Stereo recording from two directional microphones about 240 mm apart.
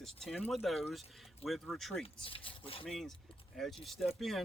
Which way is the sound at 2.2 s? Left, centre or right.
Left.